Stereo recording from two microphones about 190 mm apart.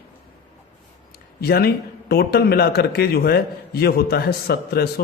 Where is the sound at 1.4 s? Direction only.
55° left (ahead or behind).